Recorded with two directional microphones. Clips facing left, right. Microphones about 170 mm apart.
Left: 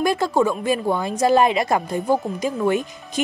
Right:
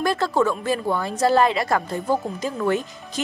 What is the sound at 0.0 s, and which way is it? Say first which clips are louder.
Speech: left 2 dB; 15° left (ahead or behind).